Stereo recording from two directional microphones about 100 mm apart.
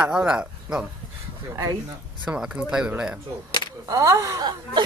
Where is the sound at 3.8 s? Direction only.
35° right (ahead or behind).